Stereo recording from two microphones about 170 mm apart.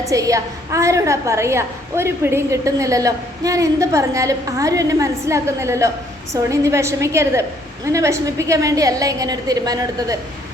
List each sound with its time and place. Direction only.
0.0 s a woman's voice: 20° right (ahead or behind)